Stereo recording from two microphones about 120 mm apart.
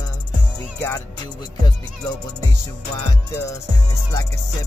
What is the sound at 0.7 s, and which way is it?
Music, 20° left (ahead or behind).